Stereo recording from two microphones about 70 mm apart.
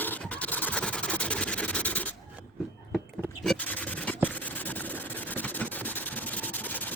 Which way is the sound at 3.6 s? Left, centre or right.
Left.